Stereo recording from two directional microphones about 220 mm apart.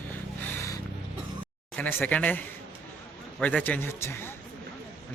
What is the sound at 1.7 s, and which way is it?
A man's voice, 10° left (ahead or behind).